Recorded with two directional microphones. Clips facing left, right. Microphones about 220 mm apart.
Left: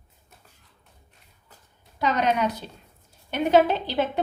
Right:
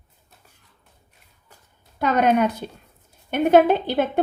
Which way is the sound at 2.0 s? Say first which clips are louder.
Right 5 dB; 55° right (ahead or behind).